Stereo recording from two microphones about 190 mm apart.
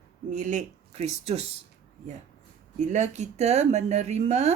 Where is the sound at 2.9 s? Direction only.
40° right (ahead or behind).